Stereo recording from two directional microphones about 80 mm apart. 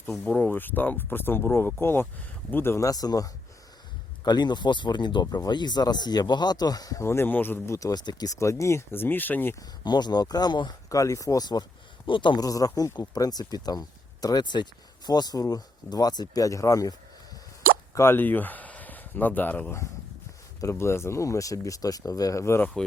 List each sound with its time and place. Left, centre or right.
0.3 s speech: centre
0.5 s speech: left
2.8 s speech: left
4.2 s speech: left
7.0 s speech: left
7.7 s speech: left
8.4 s speech: left
9.8 s speech: left
10.8 s speech: left
12.0 s a man's voice: left
12.4 s speech: left
17.9 s speech: left
20.6 s speech: left
22.6 s speech: centre